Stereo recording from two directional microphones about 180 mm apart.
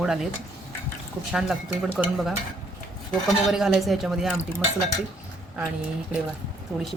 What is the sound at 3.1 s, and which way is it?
Speech, centre (ahead or behind).